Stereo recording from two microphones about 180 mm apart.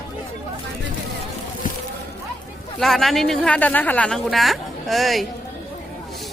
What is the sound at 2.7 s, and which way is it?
A woman's voice, centre (ahead or behind).